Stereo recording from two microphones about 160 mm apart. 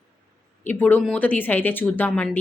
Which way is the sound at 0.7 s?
10° left (ahead or behind).